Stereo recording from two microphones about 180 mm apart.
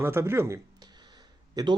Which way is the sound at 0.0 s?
15° right (ahead or behind).